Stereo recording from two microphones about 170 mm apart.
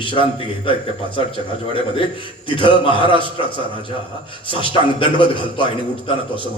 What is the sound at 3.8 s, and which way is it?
A man's voice, 30° left (ahead or behind).